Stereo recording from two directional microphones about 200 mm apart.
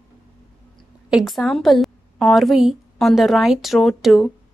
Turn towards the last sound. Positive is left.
turn(degrees=0)  # may be behind; listen again after turning